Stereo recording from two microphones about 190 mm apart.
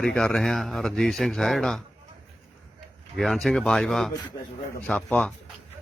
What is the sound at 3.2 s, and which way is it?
Speech, centre (ahead or behind).